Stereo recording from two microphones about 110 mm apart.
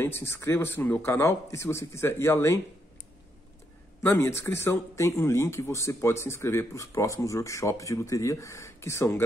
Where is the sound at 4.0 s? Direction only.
25° left (ahead or behind).